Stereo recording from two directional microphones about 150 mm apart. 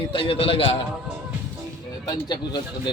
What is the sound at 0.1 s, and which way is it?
Speech, 35° left (ahead or behind).